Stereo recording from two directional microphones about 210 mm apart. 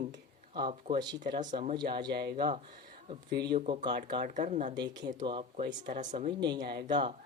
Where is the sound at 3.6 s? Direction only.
30° right (ahead or behind).